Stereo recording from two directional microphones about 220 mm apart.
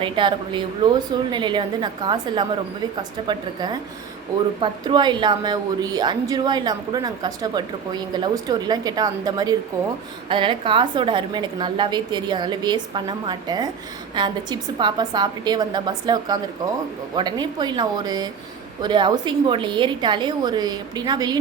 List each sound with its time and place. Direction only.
0.0 s a woman's voice: 20° right (ahead or behind)